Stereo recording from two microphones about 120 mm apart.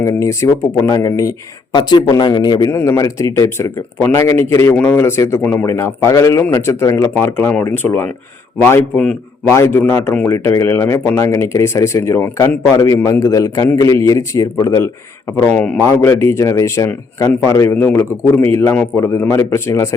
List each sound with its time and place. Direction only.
0.0 s a man's voice: 25° left (ahead or behind)
2.6 s speech: 25° left (ahead or behind)
9.5 s speech: 20° left (ahead or behind)
15.4 s speech: 15° left (ahead or behind)
15.8 s speech: 20° left (ahead or behind)